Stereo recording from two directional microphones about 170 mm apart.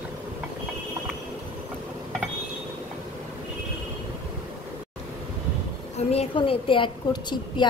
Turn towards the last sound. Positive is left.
turn(degrees=25)  # may be behind; listen again after turning